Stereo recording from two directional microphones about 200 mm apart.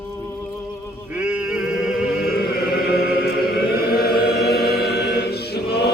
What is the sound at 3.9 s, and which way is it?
Choir, 50° left (ahead or behind).